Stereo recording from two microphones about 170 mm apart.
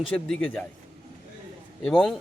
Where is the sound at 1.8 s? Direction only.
5° left (ahead or behind).